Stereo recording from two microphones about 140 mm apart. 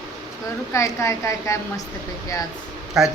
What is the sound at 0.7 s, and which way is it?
A woman's voice, 20° left (ahead or behind).